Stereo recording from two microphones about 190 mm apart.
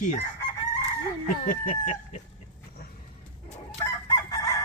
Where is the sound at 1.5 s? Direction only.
40° left (ahead or behind).